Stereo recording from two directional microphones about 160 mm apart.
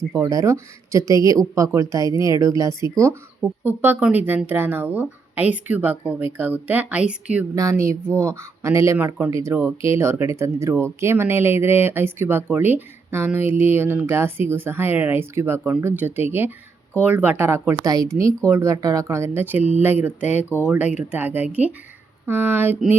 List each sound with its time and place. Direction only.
0.2 s speech: 20° right (ahead or behind)
7.5 s speech: 20° right (ahead or behind)